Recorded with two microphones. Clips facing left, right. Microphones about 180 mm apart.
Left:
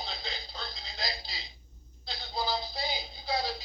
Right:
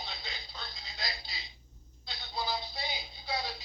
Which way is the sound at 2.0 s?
35° left (ahead or behind).